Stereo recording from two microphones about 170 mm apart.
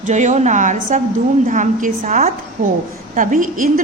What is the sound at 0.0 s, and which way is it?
A woman's voice, 45° right (ahead or behind).